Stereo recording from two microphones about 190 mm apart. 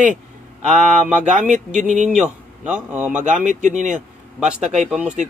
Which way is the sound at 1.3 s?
40° right (ahead or behind).